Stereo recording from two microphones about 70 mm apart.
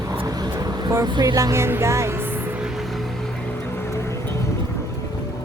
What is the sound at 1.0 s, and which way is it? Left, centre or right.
Speech, right.